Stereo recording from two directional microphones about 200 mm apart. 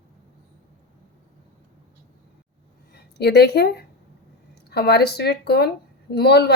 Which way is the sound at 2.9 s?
55° left (ahead or behind).